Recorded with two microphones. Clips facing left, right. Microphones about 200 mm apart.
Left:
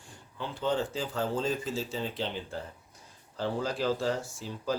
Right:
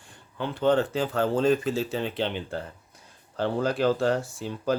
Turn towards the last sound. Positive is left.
turn(degrees=-65)  # may be behind; listen again after turning